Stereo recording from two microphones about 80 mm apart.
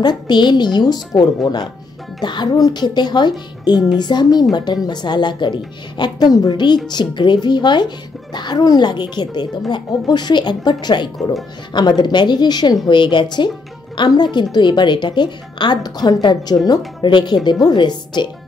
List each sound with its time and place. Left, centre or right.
0.0 s speech: left
12.8 s speech: left
13.9 s speech: left